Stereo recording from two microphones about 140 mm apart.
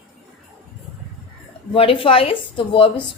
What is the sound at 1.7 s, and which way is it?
A man's voice, 40° left (ahead or behind).